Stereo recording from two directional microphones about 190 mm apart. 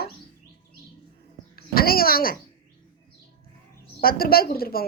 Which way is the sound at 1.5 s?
50° left (ahead or behind).